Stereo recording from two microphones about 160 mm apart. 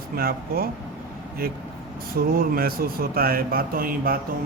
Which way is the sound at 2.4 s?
65° right (ahead or behind).